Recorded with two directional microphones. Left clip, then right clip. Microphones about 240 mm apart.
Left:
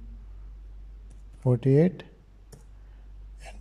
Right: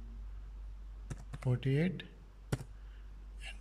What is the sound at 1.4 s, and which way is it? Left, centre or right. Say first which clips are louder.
Speech: left 14 dB; centre.